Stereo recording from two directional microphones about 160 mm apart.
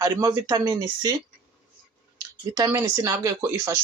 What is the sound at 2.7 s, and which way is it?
Speech, 20° right (ahead or behind).